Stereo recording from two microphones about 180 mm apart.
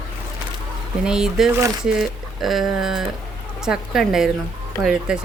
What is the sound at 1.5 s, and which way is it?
Speech, 15° right (ahead or behind).